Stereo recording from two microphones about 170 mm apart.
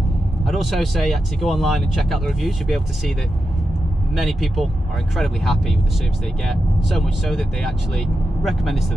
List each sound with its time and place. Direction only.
0.5 s speech: centre (ahead or behind)
4.1 s speech: centre (ahead or behind)